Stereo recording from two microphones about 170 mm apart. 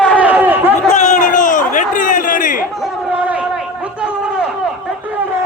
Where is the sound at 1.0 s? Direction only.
45° left (ahead or behind).